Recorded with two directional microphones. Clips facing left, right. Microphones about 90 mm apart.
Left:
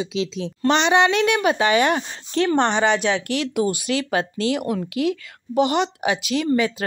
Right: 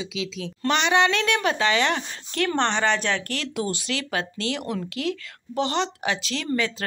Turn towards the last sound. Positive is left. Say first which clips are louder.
# left 6 dB
turn(degrees=15)  # may be behind; listen again after turning